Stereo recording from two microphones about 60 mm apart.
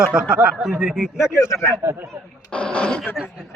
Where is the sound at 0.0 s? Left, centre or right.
Centre.